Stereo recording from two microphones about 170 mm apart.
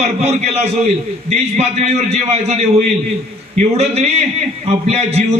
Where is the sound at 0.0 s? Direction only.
40° right (ahead or behind).